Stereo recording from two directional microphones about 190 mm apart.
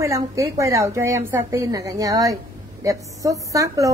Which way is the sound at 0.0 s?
15° right (ahead or behind).